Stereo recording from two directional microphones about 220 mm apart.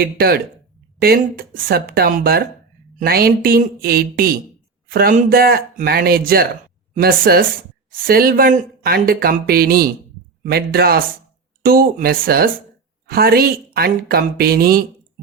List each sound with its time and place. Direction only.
0.0 s speech: 45° right (ahead or behind)